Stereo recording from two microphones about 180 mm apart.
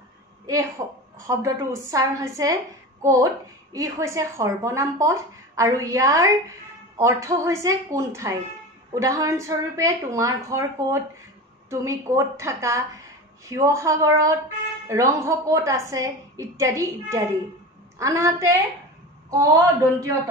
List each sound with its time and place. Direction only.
0.5 s a woman's voice: 15° right (ahead or behind)